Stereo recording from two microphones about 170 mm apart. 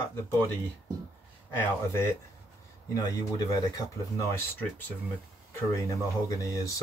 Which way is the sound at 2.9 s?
20° left (ahead or behind).